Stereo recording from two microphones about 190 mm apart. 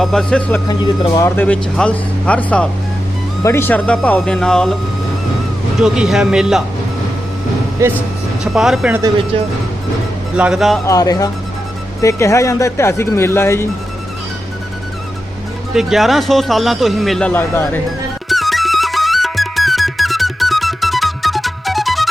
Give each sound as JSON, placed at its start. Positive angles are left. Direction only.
{"t": 0.0, "sound": "speech", "side_deg": 5}
{"t": 0.7, "sound": "speech", "side_deg": 20}
{"t": 1.4, "sound": "speech", "side_deg": 5}
{"t": 5.8, "sound": "speech", "side_deg": -5}
{"t": 7.8, "sound": "speech", "side_deg": -15}
{"t": 8.5, "sound": "speech", "side_deg": 0}
{"t": 10.3, "sound": "speech", "side_deg": -5}
{"t": 10.8, "sound": "speech", "side_deg": 20}
{"t": 15.7, "sound": "speech", "side_deg": 0}
{"t": 18.3, "sound": "music", "side_deg": 0}